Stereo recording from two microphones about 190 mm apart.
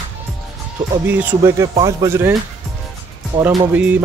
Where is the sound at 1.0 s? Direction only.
10° right (ahead or behind).